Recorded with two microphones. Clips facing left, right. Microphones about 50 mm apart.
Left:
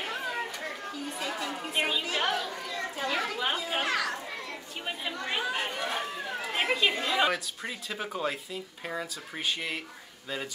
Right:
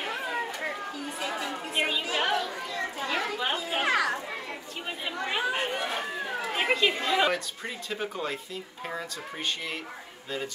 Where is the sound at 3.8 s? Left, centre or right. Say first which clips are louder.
Right 4 dB; right.